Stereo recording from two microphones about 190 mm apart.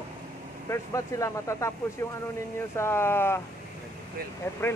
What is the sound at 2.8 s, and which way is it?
Speech, 15° left (ahead or behind).